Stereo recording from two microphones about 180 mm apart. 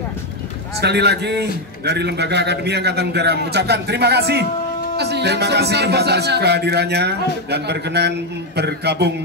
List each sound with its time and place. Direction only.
0.7 s a man's voice: 65° right (ahead or behind)